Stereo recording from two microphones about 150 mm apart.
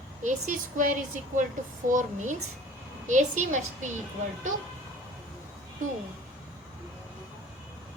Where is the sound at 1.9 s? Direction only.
60° right (ahead or behind).